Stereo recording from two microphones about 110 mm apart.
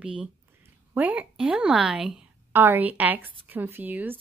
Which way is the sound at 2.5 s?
20° right (ahead or behind).